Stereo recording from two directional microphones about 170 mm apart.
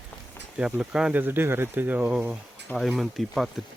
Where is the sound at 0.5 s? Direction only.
5° right (ahead or behind).